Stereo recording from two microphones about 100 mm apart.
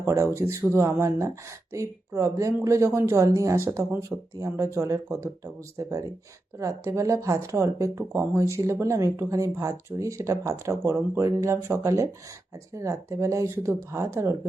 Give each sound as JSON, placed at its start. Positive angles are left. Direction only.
{"t": 0.0, "sound": "speech", "side_deg": -30}